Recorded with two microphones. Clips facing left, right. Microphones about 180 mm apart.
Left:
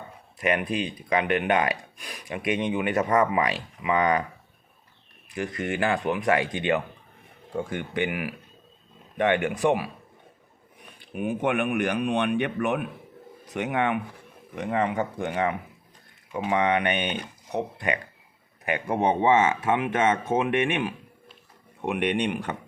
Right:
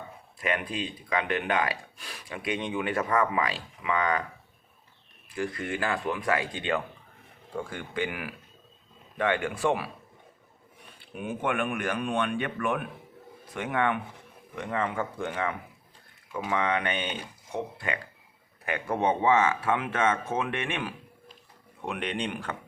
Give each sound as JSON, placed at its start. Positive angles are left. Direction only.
{"t": 1.1, "sound": "speech", "side_deg": 20}
{"t": 5.5, "sound": "speech", "side_deg": 25}
{"t": 11.0, "sound": "speech", "side_deg": 15}